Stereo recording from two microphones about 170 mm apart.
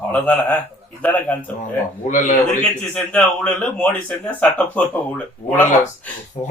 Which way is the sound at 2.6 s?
10° left (ahead or behind).